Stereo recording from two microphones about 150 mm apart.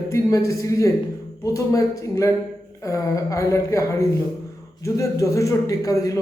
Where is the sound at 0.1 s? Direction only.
20° left (ahead or behind).